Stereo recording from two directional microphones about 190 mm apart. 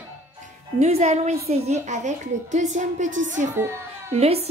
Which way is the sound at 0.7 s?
35° right (ahead or behind).